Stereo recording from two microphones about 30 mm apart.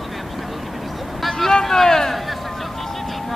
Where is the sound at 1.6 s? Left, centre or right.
Centre.